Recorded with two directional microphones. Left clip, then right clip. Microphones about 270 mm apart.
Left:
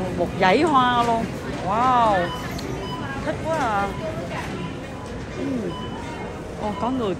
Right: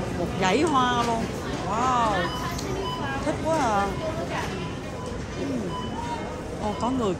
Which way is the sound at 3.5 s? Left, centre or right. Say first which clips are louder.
Left 1 dB; centre.